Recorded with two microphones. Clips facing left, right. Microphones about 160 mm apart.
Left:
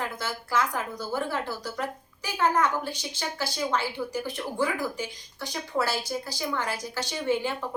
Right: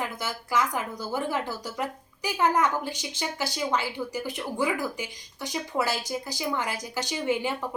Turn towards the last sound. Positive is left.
turn(degrees=-15)  # may be behind; listen again after turning